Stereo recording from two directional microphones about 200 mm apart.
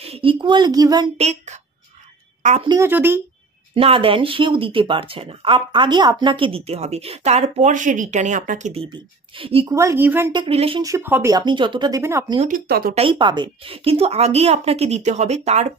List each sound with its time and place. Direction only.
0.0 s speech: 30° right (ahead or behind)
1.1 s a woman's voice: 35° right (ahead or behind)
2.7 s speech: 10° right (ahead or behind)
3.7 s speech: 25° right (ahead or behind)
8.9 s speech: 25° right (ahead or behind)
9.8 s speech: 10° right (ahead or behind)
10.3 s speech: 25° right (ahead or behind)
10.8 s speech: 15° right (ahead or behind)
12.4 s speech: 45° right (ahead or behind)
12.9 s a woman's voice: 25° right (ahead or behind)